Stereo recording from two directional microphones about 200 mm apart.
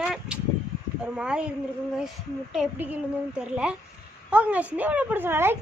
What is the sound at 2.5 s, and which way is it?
Speech, 5° right (ahead or behind).